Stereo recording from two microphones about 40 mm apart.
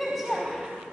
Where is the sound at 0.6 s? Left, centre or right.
Centre.